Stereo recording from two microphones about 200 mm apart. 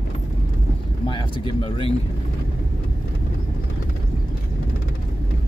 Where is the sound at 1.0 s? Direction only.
25° left (ahead or behind).